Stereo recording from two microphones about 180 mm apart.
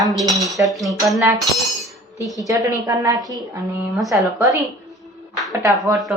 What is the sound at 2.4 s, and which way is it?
Speech, 20° right (ahead or behind).